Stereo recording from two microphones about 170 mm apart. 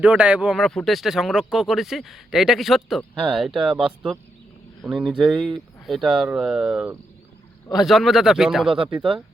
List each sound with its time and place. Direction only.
0.0 s speech: 5° right (ahead or behind)
8.7 s speech: 30° right (ahead or behind)